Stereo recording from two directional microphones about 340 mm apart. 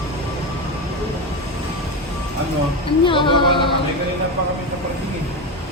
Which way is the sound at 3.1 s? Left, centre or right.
Centre.